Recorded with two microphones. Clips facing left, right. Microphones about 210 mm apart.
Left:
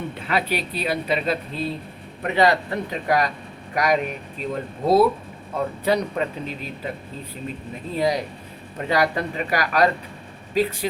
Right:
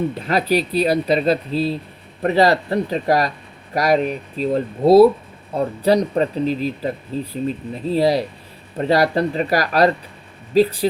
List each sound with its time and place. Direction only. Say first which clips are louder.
0.1 s speech: right 6 dB; 40° right (ahead or behind)